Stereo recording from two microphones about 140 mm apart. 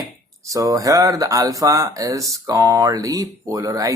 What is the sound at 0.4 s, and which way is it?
Speech, 25° right (ahead or behind).